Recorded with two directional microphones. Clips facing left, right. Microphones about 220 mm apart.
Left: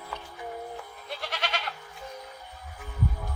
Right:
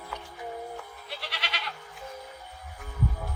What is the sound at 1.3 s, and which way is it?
Goat, 45° left (ahead or behind).